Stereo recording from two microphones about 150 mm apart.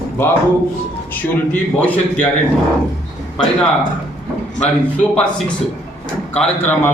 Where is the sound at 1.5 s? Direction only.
10° left (ahead or behind).